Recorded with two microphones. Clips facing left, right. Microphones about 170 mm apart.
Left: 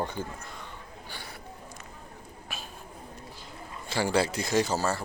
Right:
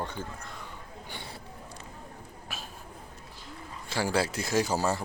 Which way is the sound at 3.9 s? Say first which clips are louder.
Left 2 dB; centre (ahead or behind).